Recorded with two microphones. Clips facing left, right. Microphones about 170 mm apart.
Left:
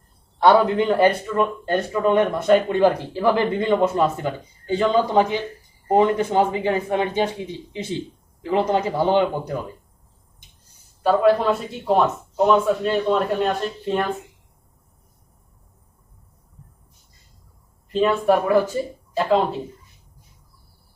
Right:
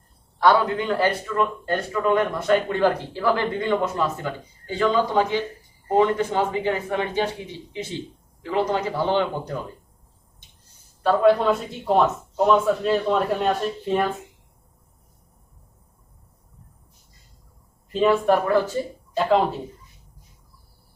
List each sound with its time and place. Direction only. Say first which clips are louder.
0.3 s a man's voice: left 3 dB; 25° left (ahead or behind)
8.4 s speech: left 3 dB; 20° left (ahead or behind)
11.0 s speech: left 1 dB; 5° left (ahead or behind)
17.8 s speech: even; centre (ahead or behind)